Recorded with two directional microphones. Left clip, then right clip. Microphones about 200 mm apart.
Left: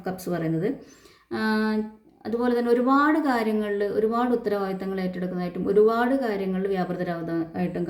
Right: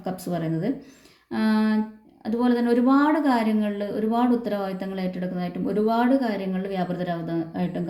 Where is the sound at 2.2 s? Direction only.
15° left (ahead or behind).